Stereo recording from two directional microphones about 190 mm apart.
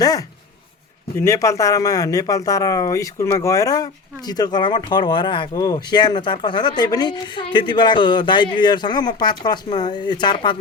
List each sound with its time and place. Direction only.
0.0 s speech: 20° left (ahead or behind)